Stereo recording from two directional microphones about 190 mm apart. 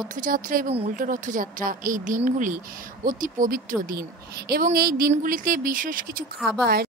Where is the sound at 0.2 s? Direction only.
45° right (ahead or behind).